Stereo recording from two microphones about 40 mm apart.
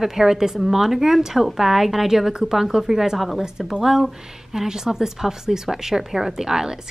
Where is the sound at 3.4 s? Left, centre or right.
Centre.